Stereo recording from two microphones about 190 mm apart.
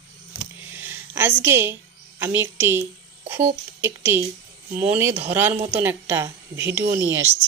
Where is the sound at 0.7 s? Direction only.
10° right (ahead or behind).